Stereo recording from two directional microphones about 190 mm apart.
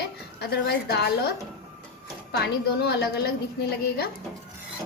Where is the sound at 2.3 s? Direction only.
60° left (ahead or behind).